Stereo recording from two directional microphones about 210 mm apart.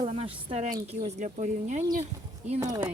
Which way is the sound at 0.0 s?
30° right (ahead or behind).